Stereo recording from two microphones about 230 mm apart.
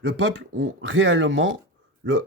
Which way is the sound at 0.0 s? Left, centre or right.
Right.